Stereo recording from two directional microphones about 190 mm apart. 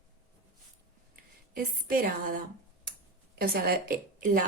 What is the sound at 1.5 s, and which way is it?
Speech, 50° right (ahead or behind).